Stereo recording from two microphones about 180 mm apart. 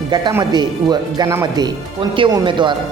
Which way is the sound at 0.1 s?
25° right (ahead or behind).